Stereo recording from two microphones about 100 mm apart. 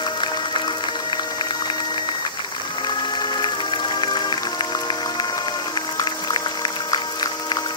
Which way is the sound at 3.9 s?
50° left (ahead or behind).